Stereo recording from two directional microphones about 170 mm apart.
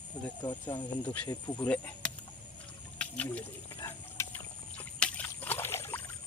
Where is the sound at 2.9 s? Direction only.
5° left (ahead or behind).